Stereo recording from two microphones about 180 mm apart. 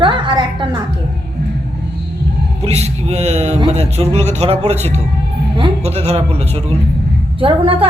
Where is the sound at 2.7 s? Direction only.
35° right (ahead or behind).